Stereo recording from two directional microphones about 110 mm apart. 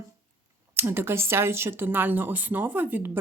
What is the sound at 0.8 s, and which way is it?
Speech, 20° right (ahead or behind).